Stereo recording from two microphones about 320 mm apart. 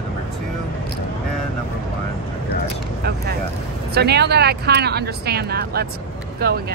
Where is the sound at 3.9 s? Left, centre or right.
Right.